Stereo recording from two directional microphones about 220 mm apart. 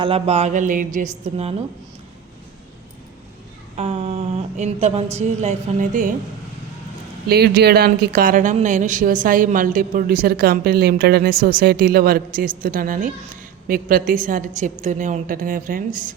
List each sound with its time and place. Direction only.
0.0 s a woman's voice: 25° right (ahead or behind)
3.8 s a sound: 25° right (ahead or behind)
5.1 s a woman's voice: 30° right (ahead or behind)
7.3 s a woman's voice: 45° right (ahead or behind)